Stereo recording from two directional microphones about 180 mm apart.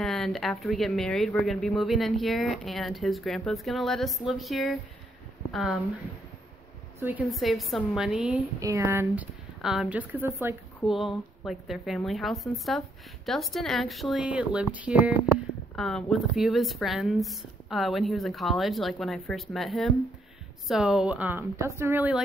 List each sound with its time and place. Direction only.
0.0 s speech: centre (ahead or behind)
7.0 s a woman's voice: 10° right (ahead or behind)
7.2 s speech: centre (ahead or behind)
8.5 s speech: 15° right (ahead or behind)
10.9 s speech: centre (ahead or behind)